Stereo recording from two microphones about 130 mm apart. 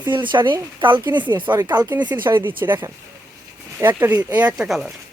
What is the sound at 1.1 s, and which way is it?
Speech, 20° right (ahead or behind).